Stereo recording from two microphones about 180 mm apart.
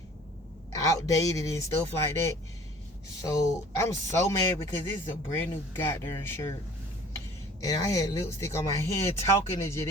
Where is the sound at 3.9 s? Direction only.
15° left (ahead or behind).